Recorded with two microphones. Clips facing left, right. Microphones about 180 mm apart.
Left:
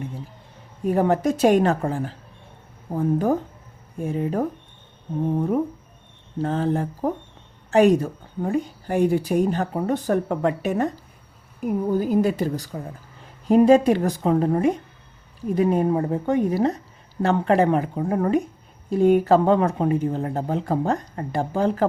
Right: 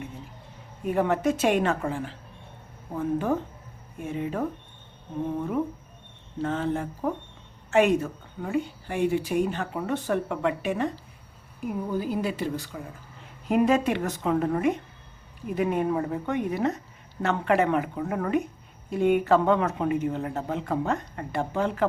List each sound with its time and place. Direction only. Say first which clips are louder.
0.9 s a woman's voice: left 4 dB; 35° left (ahead or behind)
6.4 s a woman's voice: left 4 dB; 35° left (ahead or behind)